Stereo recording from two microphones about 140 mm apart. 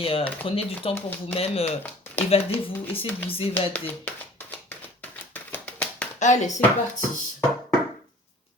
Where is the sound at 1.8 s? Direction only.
10° left (ahead or behind).